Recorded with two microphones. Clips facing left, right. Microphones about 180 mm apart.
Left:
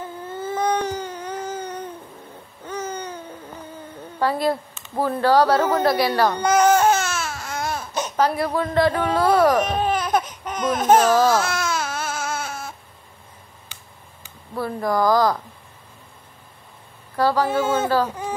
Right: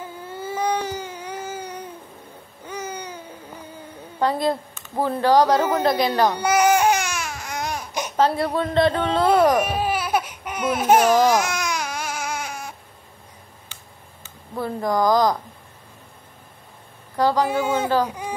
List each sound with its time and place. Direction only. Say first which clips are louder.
0.0 s baby cry: left 2 dB; 10° right (ahead or behind)
2.6 s a sound: left 2 dB; 10° right (ahead or behind)
4.2 s a woman's voice: even; 20° right (ahead or behind)
5.9 s baby cry: even; 20° right (ahead or behind)
8.2 s a woman's voice: right 1 dB; 25° right (ahead or behind)
9.6 s laughter: left 1 dB; 10° right (ahead or behind)
14.5 s a woman's voice: even; 20° right (ahead or behind)
17.2 s speech: even; 15° right (ahead or behind)